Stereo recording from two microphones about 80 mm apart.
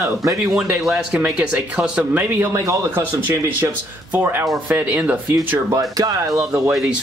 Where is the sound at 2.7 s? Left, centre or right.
Right.